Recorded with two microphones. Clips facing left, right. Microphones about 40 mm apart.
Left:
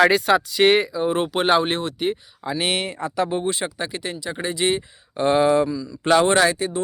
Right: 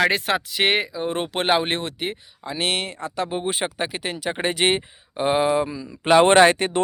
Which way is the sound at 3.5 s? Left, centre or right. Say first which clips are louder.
Even; right.